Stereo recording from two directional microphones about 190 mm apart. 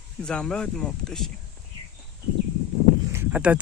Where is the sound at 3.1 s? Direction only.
10° right (ahead or behind).